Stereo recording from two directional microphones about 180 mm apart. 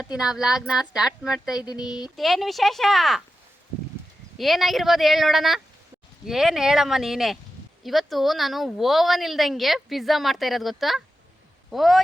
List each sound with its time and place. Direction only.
0.0 s a woman's voice: 5° right (ahead or behind)
1.6 s speech: 20° left (ahead or behind)
2.1 s a woman's voice: centre (ahead or behind)
4.4 s a woman's voice: centre (ahead or behind)